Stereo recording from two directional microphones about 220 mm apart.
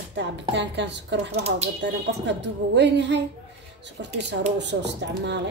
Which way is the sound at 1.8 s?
50° right (ahead or behind).